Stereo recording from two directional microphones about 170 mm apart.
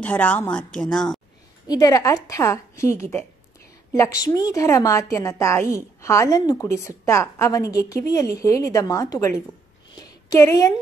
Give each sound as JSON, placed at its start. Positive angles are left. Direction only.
{"t": 0.0, "sound": "a woman's voice", "side_deg": 10}
{"t": 1.7, "sound": "a woman's voice", "side_deg": 20}
{"t": 9.9, "sound": "a sound", "side_deg": 20}